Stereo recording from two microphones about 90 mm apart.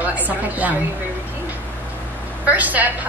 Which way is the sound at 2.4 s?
15° right (ahead or behind).